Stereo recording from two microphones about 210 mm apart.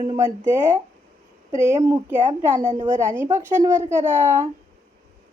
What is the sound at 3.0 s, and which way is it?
Speech, 15° right (ahead or behind).